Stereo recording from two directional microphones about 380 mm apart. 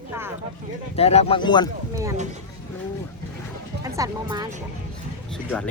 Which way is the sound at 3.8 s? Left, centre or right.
Centre.